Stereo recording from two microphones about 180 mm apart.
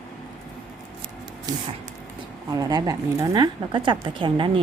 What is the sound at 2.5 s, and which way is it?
A woman's voice, 20° right (ahead or behind).